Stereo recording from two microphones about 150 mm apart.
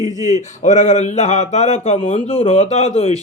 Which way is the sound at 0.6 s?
50° left (ahead or behind).